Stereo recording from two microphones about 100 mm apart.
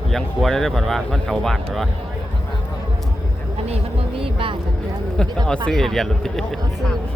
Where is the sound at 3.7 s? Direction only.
70° right (ahead or behind).